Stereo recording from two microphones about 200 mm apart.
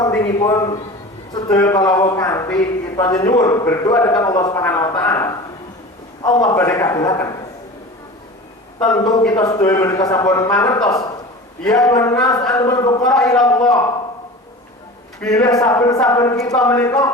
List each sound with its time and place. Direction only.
0.0 s a man's voice: 15° left (ahead or behind)
9.3 s a man's voice: 20° left (ahead or behind)
13.0 s a man's voice: 5° left (ahead or behind)
15.3 s a man's voice: 20° left (ahead or behind)